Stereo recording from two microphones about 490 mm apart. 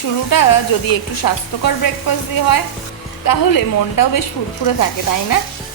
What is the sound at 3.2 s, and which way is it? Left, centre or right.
A woman's voice, left.